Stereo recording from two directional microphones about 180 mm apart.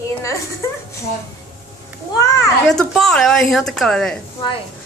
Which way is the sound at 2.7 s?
Centre (ahead or behind).